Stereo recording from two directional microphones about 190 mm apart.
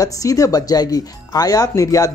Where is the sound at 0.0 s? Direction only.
20° left (ahead or behind).